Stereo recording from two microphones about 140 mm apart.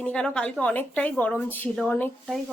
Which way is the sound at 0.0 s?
5° left (ahead or behind).